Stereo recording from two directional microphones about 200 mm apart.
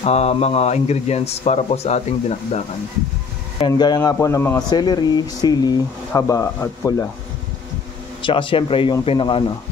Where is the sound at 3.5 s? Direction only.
20° left (ahead or behind).